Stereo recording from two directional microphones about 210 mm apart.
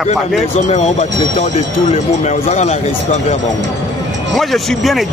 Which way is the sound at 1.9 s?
35° left (ahead or behind).